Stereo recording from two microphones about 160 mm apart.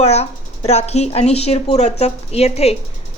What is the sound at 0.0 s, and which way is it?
Speech, 40° left (ahead or behind).